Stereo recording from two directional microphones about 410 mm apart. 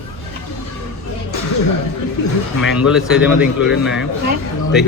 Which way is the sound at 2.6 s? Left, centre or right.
Centre.